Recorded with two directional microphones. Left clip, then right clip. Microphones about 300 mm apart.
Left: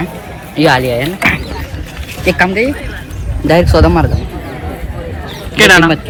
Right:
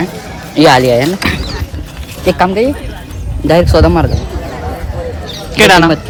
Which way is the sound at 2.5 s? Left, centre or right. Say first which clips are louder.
Right 1 dB; centre.